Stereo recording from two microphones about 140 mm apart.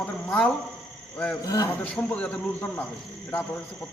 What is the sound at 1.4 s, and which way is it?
Speech, 25° left (ahead or behind).